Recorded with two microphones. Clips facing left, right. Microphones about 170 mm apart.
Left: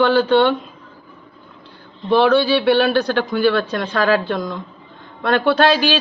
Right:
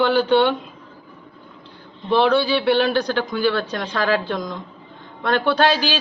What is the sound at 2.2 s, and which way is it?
Speech, 20° right (ahead or behind).